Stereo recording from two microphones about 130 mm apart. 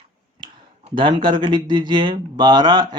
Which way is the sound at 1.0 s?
40° right (ahead or behind).